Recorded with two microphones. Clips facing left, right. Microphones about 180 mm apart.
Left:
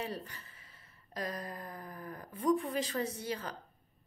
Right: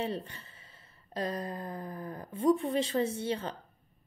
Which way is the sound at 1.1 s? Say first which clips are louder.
Right 5 dB; 30° right (ahead or behind).